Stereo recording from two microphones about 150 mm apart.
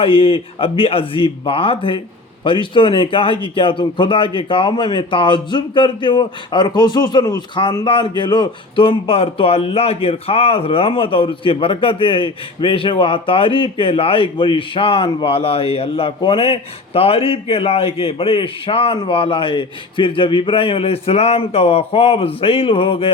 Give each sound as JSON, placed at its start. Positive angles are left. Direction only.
{"t": 0.0, "sound": "speech", "side_deg": 35}